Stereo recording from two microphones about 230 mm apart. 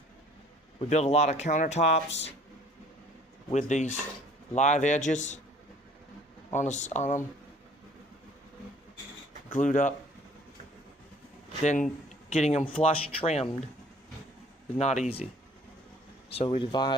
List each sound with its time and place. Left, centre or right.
0.8 s speech: left
3.5 s a man's voice: left
6.5 s a man's voice: left
9.5 s a man's voice: left
11.6 s speech: left
14.8 s speech: left
16.3 s speech: left